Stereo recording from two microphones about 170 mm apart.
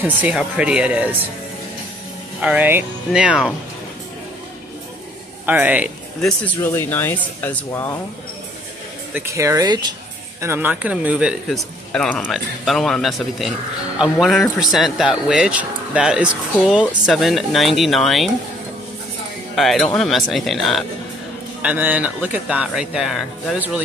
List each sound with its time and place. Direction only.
0.0 s speech: 10° right (ahead or behind)
2.4 s speech: 10° right (ahead or behind)
5.5 s speech: 10° right (ahead or behind)
6.2 s speech: 10° left (ahead or behind)
9.1 s speech: 15° right (ahead or behind)
10.4 s speech: 10° right (ahead or behind)
19.5 s speech: centre (ahead or behind)